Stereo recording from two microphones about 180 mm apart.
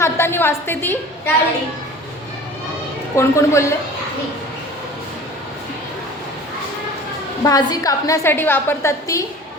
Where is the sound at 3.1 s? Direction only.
15° left (ahead or behind).